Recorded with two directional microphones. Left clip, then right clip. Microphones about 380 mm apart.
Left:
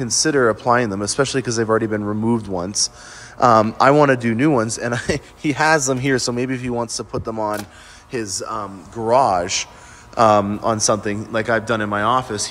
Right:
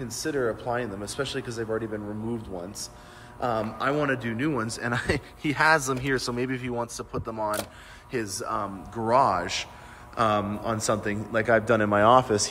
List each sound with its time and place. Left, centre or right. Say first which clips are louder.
0.0 s speech: left 12 dB; centre
0.4 s speech: left 11 dB; left
1.0 s speech: left 11 dB; centre
1.9 s speech: left 12 dB; left
2.6 s a man's voice: left 15 dB; centre